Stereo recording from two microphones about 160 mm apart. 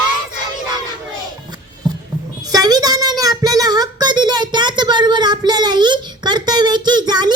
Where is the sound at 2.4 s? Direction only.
25° right (ahead or behind).